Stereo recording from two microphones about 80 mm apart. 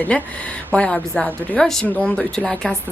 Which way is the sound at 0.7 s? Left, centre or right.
Centre.